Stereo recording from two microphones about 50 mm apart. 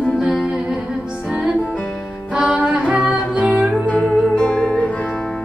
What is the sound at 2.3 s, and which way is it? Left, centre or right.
Music, centre.